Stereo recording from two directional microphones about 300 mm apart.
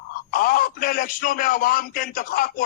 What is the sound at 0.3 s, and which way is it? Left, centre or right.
Speech, left.